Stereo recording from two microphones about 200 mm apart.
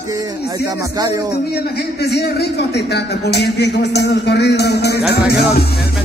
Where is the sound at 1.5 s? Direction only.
55° left (ahead or behind).